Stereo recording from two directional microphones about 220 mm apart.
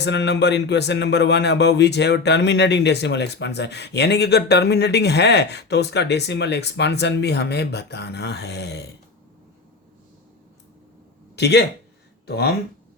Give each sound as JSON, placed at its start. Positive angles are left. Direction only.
{"t": 0.0, "sound": "speech", "side_deg": 50}
{"t": 11.3, "sound": "speech", "side_deg": 50}